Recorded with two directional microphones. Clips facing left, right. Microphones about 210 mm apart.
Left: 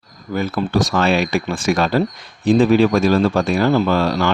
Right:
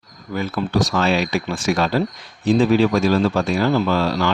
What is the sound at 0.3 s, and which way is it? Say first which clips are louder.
Speech: left 2 dB; 50° left (ahead or behind).